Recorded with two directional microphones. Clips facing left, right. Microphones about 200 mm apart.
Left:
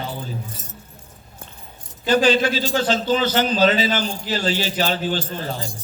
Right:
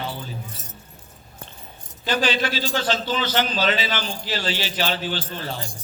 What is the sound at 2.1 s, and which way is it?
Speech, 45° left (ahead or behind).